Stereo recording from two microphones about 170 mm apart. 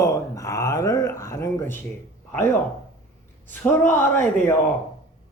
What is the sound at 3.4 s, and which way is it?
Speech, 10° left (ahead or behind).